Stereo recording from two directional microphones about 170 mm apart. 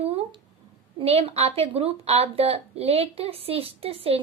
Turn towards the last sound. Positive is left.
turn(degrees=-35)  # may be behind; listen again after turning